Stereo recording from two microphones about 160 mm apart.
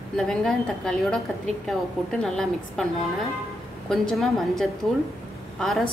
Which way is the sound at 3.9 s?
Centre (ahead or behind).